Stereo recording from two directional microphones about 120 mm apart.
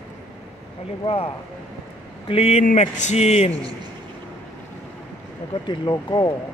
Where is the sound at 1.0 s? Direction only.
50° left (ahead or behind).